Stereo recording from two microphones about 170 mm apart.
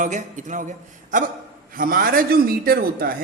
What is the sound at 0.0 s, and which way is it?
A man's voice, 45° right (ahead or behind).